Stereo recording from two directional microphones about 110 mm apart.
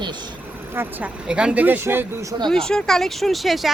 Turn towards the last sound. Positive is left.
turn(degrees=0)  # may be behind; listen again after turning